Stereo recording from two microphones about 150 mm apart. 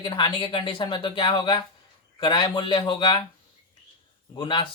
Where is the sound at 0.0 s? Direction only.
30° left (ahead or behind).